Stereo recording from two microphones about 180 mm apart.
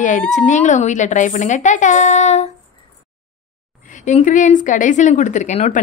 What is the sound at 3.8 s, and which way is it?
Speech, 45° left (ahead or behind).